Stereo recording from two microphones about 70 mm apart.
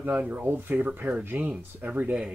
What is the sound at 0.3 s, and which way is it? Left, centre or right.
Speech, right.